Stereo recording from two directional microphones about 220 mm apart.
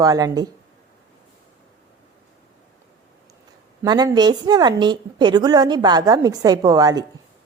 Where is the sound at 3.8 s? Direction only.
20° right (ahead or behind).